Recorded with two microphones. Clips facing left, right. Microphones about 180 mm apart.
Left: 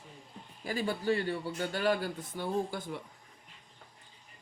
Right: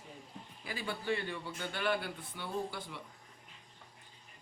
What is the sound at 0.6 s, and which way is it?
Speech, 40° left (ahead or behind).